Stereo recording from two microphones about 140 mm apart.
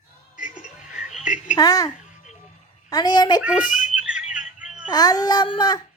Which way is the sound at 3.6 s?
70° left (ahead or behind).